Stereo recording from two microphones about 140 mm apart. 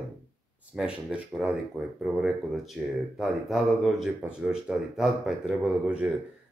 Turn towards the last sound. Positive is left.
turn(degrees=-10)  # may be behind; listen again after turning